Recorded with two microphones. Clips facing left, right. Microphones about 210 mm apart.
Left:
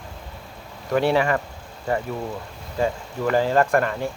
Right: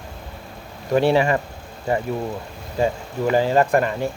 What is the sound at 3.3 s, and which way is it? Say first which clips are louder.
Speech: right 1 dB; 20° right (ahead or behind).